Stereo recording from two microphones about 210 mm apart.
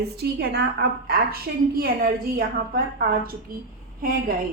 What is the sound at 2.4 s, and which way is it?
Speech, 45° right (ahead or behind).